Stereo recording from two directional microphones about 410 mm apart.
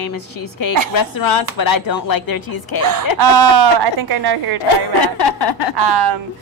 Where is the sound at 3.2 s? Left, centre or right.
Right.